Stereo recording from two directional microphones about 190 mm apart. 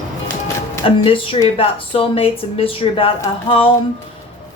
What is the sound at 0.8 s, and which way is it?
Speech, 30° left (ahead or behind).